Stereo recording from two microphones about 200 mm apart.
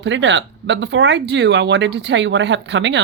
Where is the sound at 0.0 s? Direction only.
65° right (ahead or behind).